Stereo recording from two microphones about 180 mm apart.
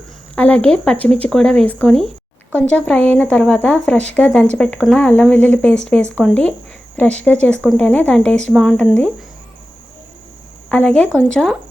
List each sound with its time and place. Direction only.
0.3 s speech: 10° left (ahead or behind)
10.7 s speech: 5° left (ahead or behind)